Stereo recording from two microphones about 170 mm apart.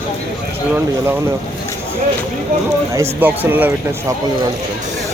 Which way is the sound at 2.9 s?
15° right (ahead or behind).